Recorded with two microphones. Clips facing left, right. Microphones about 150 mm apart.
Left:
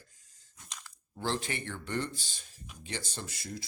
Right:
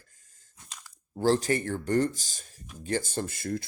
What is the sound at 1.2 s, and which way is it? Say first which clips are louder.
Speech: right 10 dB; 40° right (ahead or behind).